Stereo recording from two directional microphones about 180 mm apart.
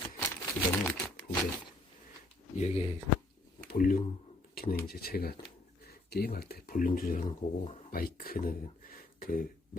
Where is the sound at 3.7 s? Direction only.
50° left (ahead or behind).